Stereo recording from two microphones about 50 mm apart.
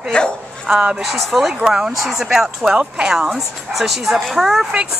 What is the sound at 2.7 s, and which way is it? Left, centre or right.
Speech, right.